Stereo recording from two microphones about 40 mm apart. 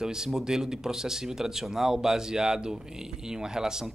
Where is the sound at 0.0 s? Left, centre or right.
Centre.